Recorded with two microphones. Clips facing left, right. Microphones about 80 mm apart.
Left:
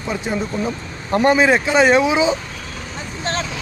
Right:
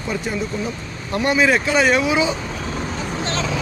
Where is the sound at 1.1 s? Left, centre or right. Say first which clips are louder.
Left 3 dB; left.